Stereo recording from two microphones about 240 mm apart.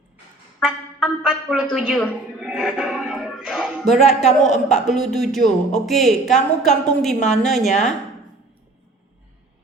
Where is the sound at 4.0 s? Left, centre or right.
Left.